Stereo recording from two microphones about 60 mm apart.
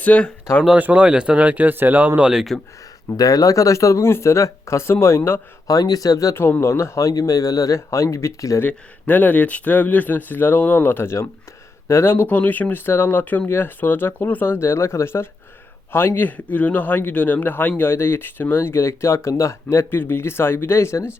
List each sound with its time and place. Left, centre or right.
0.0 s speech: left
0.8 s speech: right
2.2 s speech: centre
3.2 s speech: left
5.6 s speech: left
6.6 s speech: left
8.6 s speech: left
12.3 s a man's voice: left
19.9 s speech: left